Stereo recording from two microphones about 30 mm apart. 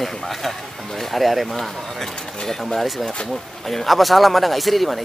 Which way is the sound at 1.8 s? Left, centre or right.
Centre.